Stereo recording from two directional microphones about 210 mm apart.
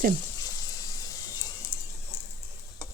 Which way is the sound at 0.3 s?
15° left (ahead or behind).